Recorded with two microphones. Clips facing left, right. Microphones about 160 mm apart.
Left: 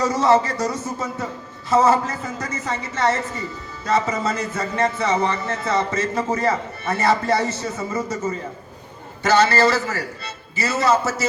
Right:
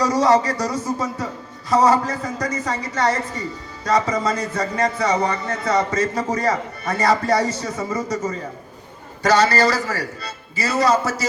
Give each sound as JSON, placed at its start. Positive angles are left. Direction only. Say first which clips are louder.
{"t": 0.0, "sound": "a man's voice", "louder": "right 1 dB", "side_deg": 25}
{"t": 9.2, "sound": "a man's voice", "louder": "even", "side_deg": 25}